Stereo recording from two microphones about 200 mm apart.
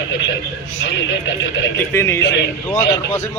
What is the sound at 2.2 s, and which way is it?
Speech, 60° left (ahead or behind).